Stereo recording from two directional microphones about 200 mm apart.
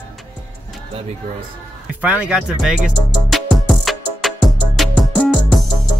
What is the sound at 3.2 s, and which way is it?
Music, centre (ahead or behind).